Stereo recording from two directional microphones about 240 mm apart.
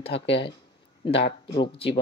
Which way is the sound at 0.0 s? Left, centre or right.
Left.